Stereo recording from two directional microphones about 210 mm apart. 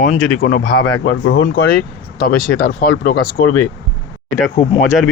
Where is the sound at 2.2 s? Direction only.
45° left (ahead or behind).